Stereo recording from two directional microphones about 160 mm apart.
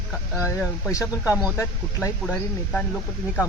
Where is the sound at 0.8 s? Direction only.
20° left (ahead or behind).